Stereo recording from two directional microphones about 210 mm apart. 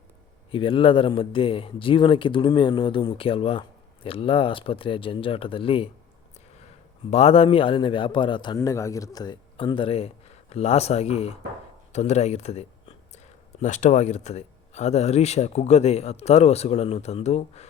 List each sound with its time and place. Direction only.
0.5 s a man's voice: 25° left (ahead or behind)
7.1 s a man's voice: 30° left (ahead or behind)